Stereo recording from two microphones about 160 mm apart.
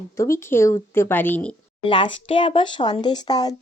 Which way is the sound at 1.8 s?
30° left (ahead or behind).